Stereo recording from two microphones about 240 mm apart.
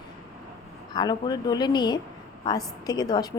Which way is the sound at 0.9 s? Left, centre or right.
Centre.